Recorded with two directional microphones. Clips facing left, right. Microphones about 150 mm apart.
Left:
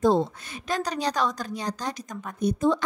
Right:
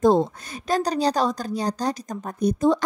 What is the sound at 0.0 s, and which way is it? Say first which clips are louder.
Speech: right 3 dB; 45° right (ahead or behind).